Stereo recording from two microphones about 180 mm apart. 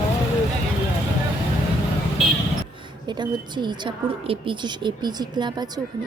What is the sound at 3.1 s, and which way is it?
A woman's voice, 25° right (ahead or behind).